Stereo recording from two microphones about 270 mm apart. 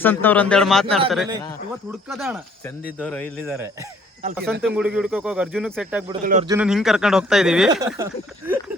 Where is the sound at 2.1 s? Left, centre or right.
Centre.